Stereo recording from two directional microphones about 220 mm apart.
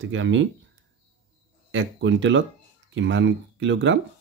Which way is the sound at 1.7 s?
60° right (ahead or behind).